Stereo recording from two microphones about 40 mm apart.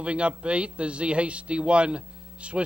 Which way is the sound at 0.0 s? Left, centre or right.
Right.